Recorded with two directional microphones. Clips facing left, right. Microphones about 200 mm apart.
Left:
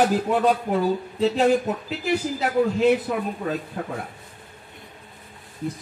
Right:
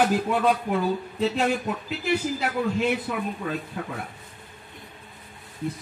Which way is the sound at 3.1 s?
40° left (ahead or behind).